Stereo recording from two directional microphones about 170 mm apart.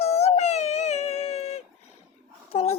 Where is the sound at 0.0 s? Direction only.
40° left (ahead or behind).